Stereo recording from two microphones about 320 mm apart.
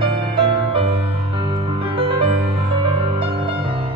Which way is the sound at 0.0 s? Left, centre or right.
Centre.